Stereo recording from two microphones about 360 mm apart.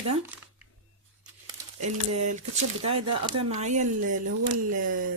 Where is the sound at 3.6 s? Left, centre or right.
Centre.